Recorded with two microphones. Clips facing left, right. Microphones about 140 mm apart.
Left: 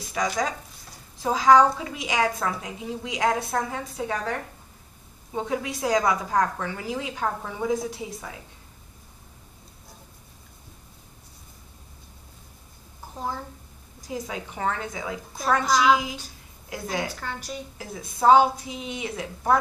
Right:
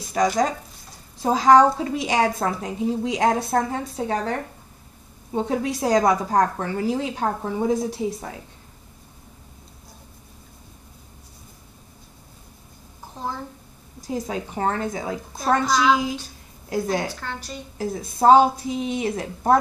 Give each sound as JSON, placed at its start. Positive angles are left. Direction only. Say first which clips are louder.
{"t": 0.1, "sound": "a woman's voice", "louder": "right 6 dB", "side_deg": -40}
{"t": 14.0, "sound": "a woman's voice", "louder": "right 5 dB", "side_deg": -40}
{"t": 16.6, "sound": "a woman's voice", "louder": "right 6 dB", "side_deg": -40}
{"t": 17.2, "sound": "a woman's voice", "louder": "right 1 dB", "side_deg": 10}
{"t": 17.7, "sound": "a woman's voice", "louder": "right 8 dB", "side_deg": -35}